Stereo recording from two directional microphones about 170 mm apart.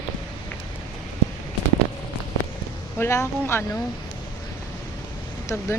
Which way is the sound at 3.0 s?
15° left (ahead or behind).